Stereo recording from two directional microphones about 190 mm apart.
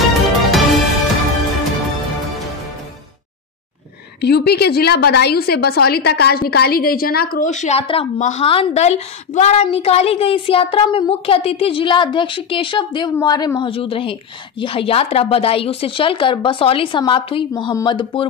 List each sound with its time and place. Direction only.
0.0 s music: centre (ahead or behind)
4.2 s a woman's voice: 60° left (ahead or behind); by 18.2 s 25° left (ahead or behind)